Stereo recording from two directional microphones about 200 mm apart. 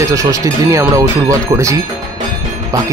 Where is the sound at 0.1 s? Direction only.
15° right (ahead or behind).